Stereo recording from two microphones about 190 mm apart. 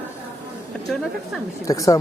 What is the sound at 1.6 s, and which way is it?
Speech, 15° left (ahead or behind).